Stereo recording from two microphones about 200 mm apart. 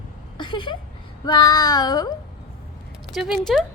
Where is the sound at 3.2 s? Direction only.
Centre (ahead or behind).